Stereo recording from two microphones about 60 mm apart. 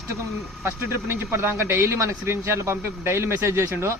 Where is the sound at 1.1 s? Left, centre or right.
Right.